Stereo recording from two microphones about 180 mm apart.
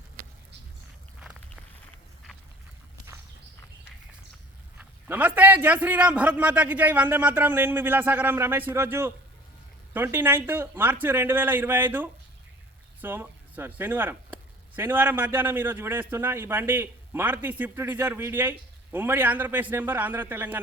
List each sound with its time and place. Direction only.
4.8 s a man's voice: 10° right (ahead or behind)